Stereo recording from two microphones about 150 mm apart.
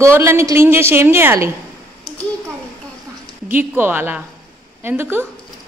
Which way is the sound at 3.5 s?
15° right (ahead or behind).